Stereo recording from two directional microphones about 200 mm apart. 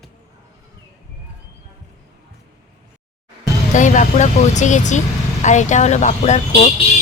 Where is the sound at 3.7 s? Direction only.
40° left (ahead or behind).